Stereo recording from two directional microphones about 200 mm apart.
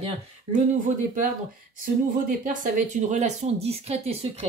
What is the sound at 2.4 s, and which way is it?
Speech, 40° right (ahead or behind).